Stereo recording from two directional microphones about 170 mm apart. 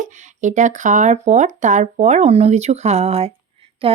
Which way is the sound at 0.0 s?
45° right (ahead or behind).